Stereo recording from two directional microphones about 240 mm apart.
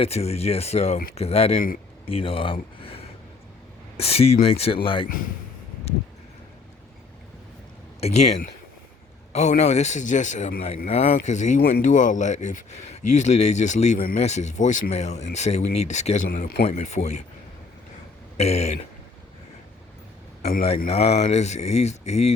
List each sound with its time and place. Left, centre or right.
0.0 s speech: left
5.0 s a man's voice: left
8.0 s speech: left
18.3 s speech: left
20.7 s speech: left